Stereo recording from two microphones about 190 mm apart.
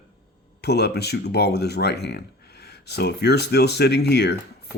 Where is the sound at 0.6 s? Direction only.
60° left (ahead or behind).